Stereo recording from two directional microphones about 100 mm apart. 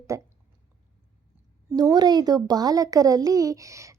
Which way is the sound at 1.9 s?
45° right (ahead or behind).